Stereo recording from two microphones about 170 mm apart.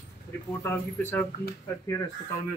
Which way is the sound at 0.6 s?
15° left (ahead or behind).